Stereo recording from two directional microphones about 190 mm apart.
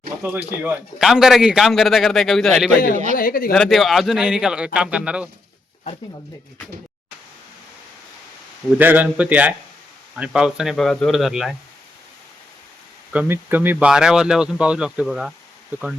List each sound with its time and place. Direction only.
0.2 s a man's voice: 10° right (ahead or behind)
3.2 s speech: 50° left (ahead or behind)
3.5 s a man's voice: centre (ahead or behind)
8.8 s a man's voice: 10° right (ahead or behind)
13.1 s a man's voice: 10° right (ahead or behind)